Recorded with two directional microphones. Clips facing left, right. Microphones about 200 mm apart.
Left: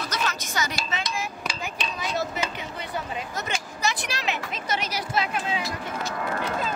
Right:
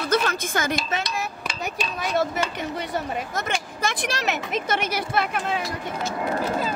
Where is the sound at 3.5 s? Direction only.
50° right (ahead or behind).